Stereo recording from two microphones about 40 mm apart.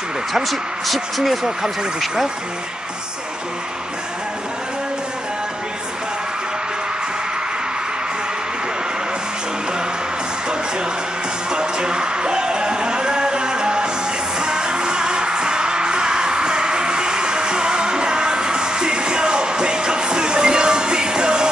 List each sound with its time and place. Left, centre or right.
0.3 s speech: centre
11.5 s a sound: right
14.4 s music: right